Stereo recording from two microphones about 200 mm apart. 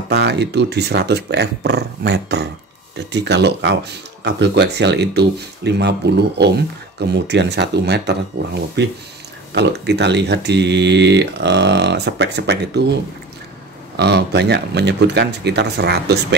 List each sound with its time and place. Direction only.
0.1 s speech: 55° right (ahead or behind)
13.9 s speech: 55° right (ahead or behind)